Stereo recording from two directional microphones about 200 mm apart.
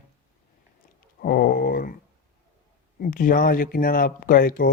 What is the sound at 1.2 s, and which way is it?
Speech, 50° left (ahead or behind).